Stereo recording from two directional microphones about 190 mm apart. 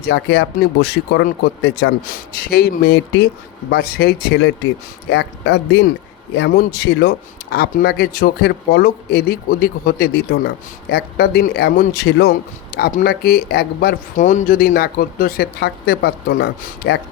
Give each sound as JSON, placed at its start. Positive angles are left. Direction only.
{"t": 0.0, "sound": "speech", "side_deg": 60}
{"t": 12.7, "sound": "speech", "side_deg": 45}